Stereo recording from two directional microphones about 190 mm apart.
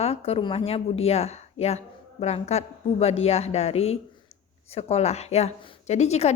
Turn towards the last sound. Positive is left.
turn(degrees=35)  # may be behind; listen again after turning